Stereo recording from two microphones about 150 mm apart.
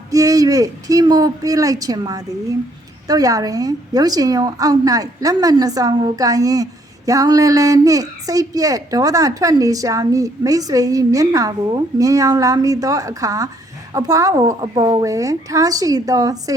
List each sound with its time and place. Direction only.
0.1 s a woman's voice: 25° right (ahead or behind)